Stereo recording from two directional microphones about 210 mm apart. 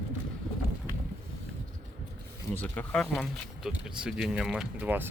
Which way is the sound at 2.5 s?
5° left (ahead or behind).